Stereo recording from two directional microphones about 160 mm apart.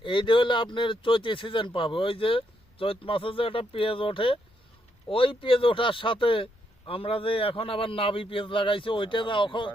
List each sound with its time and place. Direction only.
0.0 s speech: 30° left (ahead or behind)